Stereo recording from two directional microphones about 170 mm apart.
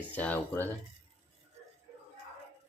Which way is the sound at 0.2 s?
10° left (ahead or behind).